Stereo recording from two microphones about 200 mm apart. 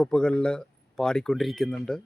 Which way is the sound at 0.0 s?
5° left (ahead or behind).